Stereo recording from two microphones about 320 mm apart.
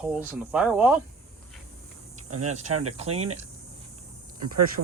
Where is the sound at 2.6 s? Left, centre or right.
Right.